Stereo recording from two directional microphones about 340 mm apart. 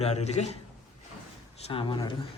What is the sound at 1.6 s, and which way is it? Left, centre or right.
Speech, centre.